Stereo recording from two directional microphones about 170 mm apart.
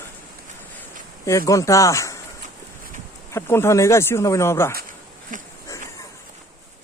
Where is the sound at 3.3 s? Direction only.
15° left (ahead or behind).